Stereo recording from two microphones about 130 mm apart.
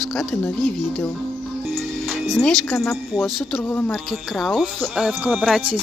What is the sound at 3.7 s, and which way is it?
Speech, 15° left (ahead or behind).